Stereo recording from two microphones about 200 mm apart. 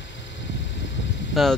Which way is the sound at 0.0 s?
65° left (ahead or behind).